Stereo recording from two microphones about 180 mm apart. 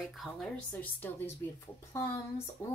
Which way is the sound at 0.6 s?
10° left (ahead or behind).